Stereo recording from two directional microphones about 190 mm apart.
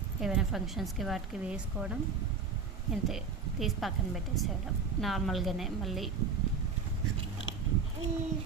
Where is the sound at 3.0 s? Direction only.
Centre (ahead or behind).